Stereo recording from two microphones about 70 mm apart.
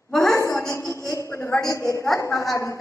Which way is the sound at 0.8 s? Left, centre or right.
Left.